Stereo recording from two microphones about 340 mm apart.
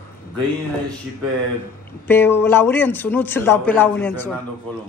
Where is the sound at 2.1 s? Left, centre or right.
Centre.